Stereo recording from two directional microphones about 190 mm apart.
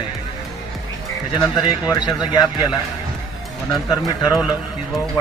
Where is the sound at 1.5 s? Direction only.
20° left (ahead or behind).